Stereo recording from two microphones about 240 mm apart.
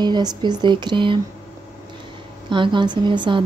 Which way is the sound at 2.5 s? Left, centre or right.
Centre.